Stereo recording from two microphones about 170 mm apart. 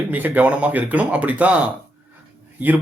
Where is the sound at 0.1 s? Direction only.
10° right (ahead or behind).